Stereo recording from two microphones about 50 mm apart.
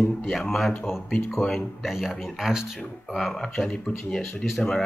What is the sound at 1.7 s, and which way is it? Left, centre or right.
Speech, centre.